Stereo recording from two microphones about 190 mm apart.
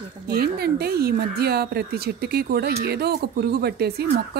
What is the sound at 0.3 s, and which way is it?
Speech, 55° right (ahead or behind).